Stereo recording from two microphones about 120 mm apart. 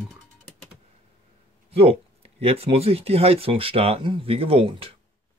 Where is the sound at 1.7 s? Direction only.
55° right (ahead or behind).